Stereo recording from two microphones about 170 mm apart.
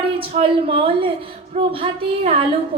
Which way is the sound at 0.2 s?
35° right (ahead or behind).